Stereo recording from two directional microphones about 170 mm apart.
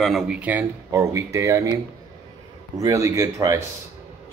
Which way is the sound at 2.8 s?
15° right (ahead or behind).